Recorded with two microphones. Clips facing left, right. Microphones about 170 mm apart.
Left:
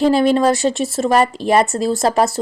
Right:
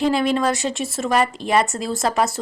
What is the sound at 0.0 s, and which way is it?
A woman's voice, 35° left (ahead or behind).